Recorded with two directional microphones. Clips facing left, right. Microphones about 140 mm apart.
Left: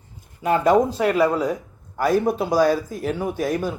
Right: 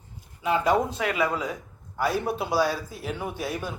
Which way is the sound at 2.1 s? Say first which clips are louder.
Left 9 dB; 45° left (ahead or behind).